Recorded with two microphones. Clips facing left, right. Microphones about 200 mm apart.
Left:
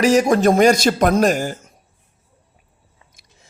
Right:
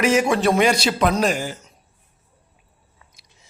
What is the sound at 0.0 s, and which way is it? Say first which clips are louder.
A man's voice: left 4 dB; 35° left (ahead or behind).